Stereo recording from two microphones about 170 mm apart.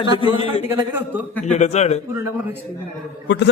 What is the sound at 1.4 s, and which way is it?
Speech, 40° left (ahead or behind).